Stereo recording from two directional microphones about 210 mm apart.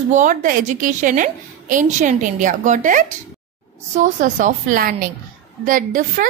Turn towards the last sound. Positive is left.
turn(degrees=-40)  # may be behind; listen again after turning